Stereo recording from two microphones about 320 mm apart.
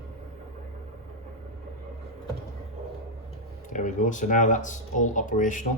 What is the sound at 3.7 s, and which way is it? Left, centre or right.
Speech, left.